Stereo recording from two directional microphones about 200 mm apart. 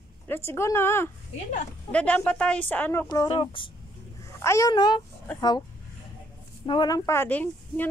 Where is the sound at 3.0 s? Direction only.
20° left (ahead or behind).